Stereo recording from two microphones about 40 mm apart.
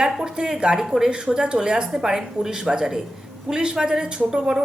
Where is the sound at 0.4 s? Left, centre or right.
Right.